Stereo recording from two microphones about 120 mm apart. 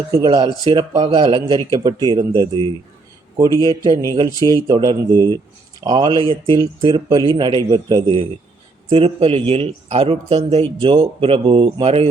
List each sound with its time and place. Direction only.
0.1 s speech: 35° right (ahead or behind)
3.3 s speech: 35° right (ahead or behind); by 12.0 s 50° right (ahead or behind)